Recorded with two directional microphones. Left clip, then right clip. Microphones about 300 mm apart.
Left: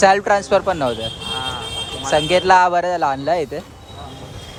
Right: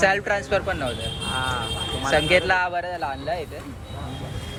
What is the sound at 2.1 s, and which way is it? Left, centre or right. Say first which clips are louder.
A man's voice: left 6 dB; centre.